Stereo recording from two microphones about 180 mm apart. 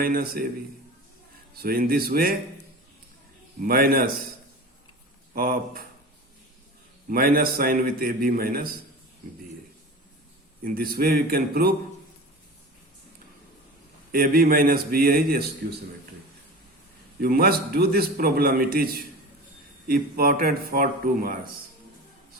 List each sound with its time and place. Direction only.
0.0 s a man's voice: 55° right (ahead or behind)
1.6 s a man's voice: 55° right (ahead or behind)
3.6 s a man's voice: 55° right (ahead or behind)
5.3 s a man's voice: 50° right (ahead or behind)
7.1 s a man's voice: 55° right (ahead or behind)
10.6 s a man's voice: 55° right (ahead or behind)
14.1 s a man's voice: 55° right (ahead or behind)
17.2 s a man's voice: 55° right (ahead or behind)